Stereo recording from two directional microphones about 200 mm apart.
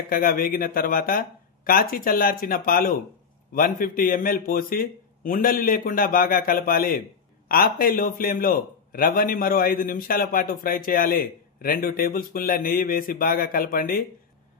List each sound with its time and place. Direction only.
0.1 s a man's voice: 45° left (ahead or behind)